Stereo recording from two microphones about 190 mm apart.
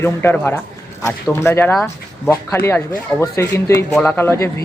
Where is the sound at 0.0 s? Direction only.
10° left (ahead or behind).